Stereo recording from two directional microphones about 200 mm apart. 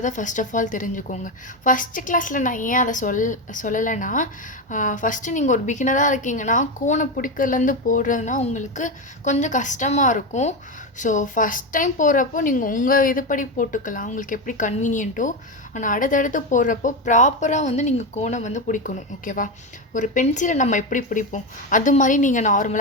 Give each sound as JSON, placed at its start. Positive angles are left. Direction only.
{"t": 0.0, "sound": "a woman's voice", "side_deg": 40}